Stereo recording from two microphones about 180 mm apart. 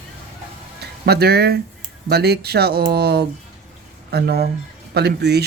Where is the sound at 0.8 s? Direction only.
65° right (ahead or behind).